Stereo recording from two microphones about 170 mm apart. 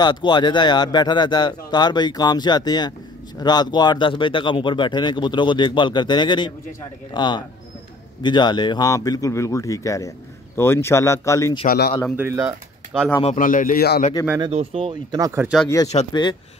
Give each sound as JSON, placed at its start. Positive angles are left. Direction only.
{"t": 0.0, "sound": "speech", "side_deg": 25}
{"t": 11.6, "sound": "speech", "side_deg": 65}
{"t": 12.2, "sound": "speech", "side_deg": -15}
{"t": 13.2, "sound": "speech", "side_deg": 45}
{"t": 14.5, "sound": "speech", "side_deg": -35}
{"t": 15.4, "sound": "speech", "side_deg": 0}
{"t": 16.1, "sound": "speech", "side_deg": 25}